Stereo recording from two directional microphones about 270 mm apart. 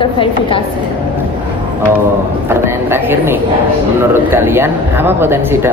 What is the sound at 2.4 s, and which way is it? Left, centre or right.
Speech, centre.